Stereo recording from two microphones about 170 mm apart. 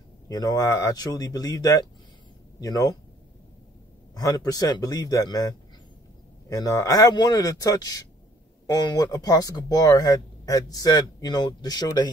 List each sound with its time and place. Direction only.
0.3 s speech: 20° left (ahead or behind)
4.1 s speech: 20° left (ahead or behind)